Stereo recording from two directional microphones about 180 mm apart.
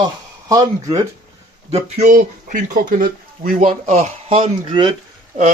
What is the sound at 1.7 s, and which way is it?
Speech, 45° right (ahead or behind).